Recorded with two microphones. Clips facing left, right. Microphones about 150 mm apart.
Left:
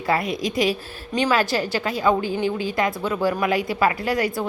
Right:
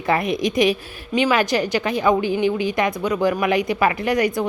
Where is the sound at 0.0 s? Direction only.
20° right (ahead or behind).